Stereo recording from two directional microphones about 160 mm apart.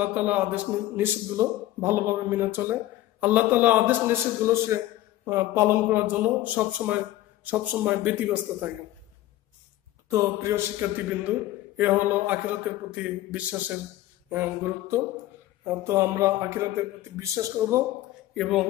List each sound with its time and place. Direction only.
0.0 s a man's voice: 10° right (ahead or behind)
10.0 s a man's voice: 20° right (ahead or behind)
18.3 s speech: centre (ahead or behind)